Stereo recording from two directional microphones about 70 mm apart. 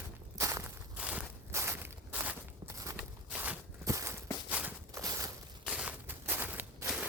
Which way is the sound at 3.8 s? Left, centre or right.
Right.